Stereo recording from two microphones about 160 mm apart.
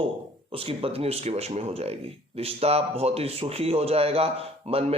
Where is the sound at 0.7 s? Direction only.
35° right (ahead or behind).